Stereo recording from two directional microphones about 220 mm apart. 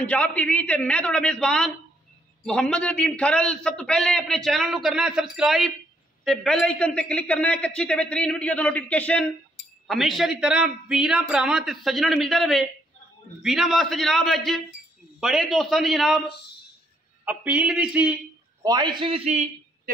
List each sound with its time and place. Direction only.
0.0 s a man's voice: 5° left (ahead or behind)
17.2 s speech: 5° right (ahead or behind)
18.6 s a man's voice: 20° right (ahead or behind)